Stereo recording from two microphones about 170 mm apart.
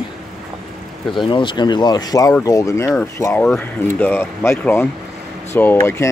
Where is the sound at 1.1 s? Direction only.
30° left (ahead or behind).